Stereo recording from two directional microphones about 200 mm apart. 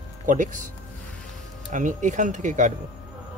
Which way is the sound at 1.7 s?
40° right (ahead or behind).